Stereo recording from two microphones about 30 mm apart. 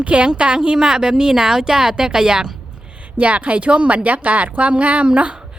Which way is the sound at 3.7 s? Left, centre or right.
Right.